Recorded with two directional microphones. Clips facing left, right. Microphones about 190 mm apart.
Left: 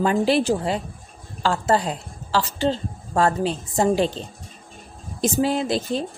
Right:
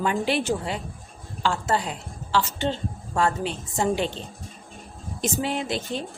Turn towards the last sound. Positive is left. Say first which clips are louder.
# left 5 dB
turn(degrees=35)  # may be behind; listen again after turning